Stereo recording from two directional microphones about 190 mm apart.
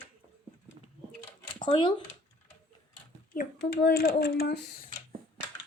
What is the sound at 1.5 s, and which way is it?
Speech, 25° left (ahead or behind).